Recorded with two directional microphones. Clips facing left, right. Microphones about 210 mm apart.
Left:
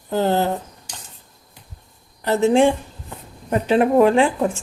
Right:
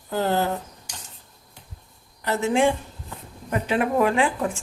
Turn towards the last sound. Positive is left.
turn(degrees=25)  # may be behind; listen again after turning